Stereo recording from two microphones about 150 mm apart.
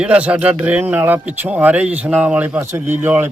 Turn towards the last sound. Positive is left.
turn(degrees=-15)  # may be behind; listen again after turning